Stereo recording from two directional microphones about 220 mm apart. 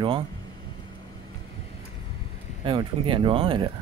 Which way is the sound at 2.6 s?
25° right (ahead or behind).